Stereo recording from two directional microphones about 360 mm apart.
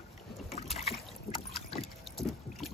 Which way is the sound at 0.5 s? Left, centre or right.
Centre.